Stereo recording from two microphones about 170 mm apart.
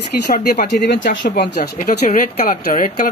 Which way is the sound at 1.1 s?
90° left.